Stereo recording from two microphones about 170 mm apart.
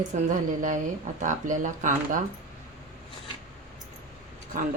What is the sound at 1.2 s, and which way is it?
Speech, 50° right (ahead or behind).